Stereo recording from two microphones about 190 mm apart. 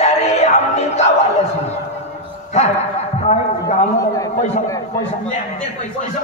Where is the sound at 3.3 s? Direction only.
35° left (ahead or behind).